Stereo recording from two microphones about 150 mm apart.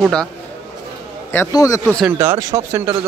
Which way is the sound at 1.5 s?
20° left (ahead or behind).